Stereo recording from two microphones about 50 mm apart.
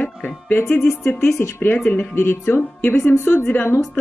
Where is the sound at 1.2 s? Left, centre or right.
Left.